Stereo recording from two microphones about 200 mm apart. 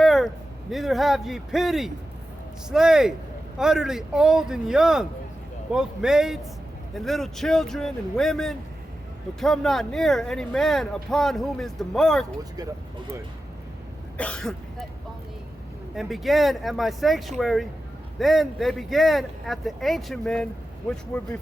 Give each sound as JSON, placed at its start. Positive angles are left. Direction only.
{"t": 0.0, "sound": "a sound", "side_deg": 0}
{"t": 0.7, "sound": "speech", "side_deg": 0}
{"t": 12.4, "sound": "speech", "side_deg": -20}
{"t": 14.2, "sound": "speech", "side_deg": 5}
{"t": 16.0, "sound": "speech", "side_deg": 0}